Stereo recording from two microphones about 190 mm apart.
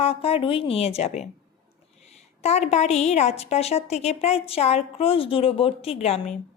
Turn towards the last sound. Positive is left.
turn(degrees=35)  # may be behind; listen again after turning